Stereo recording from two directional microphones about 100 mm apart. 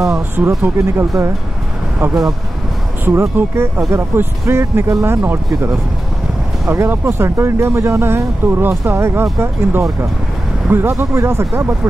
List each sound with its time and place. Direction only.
0.5 s speech: 30° right (ahead or behind)
3.1 s speech: 20° right (ahead or behind)